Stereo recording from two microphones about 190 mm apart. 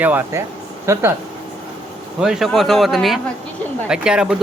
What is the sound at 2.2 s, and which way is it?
Speech, centre (ahead or behind).